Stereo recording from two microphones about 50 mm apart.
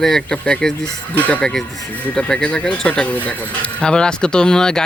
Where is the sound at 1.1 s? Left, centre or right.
Left.